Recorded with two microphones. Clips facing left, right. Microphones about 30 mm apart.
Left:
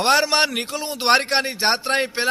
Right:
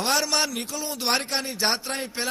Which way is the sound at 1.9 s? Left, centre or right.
Left.